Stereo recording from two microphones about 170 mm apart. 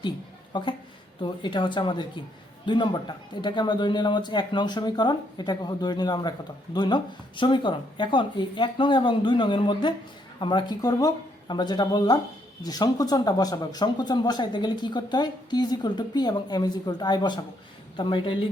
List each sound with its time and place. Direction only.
0.5 s speech: 30° left (ahead or behind)